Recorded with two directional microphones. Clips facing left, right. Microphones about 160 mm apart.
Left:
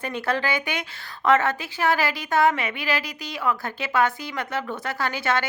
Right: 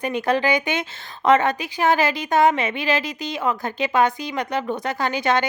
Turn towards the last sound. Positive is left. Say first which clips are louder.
# right 4 dB
turn(degrees=-20)  # may be behind; listen again after turning